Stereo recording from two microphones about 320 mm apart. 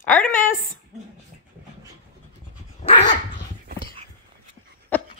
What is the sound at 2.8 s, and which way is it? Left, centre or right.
Dog, left.